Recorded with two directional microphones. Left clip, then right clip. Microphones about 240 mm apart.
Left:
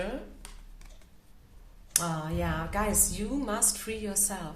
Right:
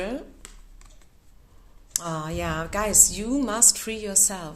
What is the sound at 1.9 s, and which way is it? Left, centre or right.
A woman's voice, right.